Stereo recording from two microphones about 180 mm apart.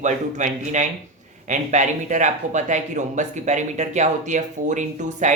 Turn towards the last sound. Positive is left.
turn(degrees=-45)  # may be behind; listen again after turning